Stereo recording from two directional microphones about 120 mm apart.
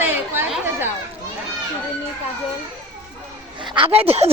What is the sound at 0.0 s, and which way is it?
Chatter, 20° right (ahead or behind).